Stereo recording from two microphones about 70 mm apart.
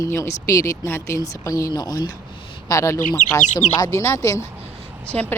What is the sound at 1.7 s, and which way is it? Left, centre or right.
Speech, left.